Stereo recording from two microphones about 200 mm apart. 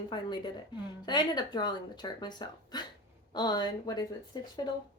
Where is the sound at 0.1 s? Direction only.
20° left (ahead or behind).